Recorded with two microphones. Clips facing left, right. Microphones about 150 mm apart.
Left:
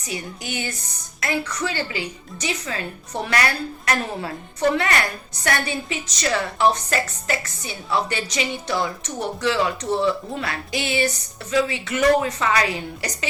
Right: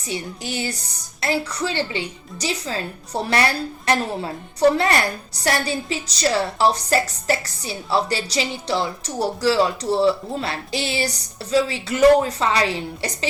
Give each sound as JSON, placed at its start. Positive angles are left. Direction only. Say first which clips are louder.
{"t": 0.0, "sound": "a woman's voice", "louder": "right 2 dB", "side_deg": -30}
{"t": 4.7, "sound": "a woman's voice", "louder": "right 2 dB", "side_deg": -35}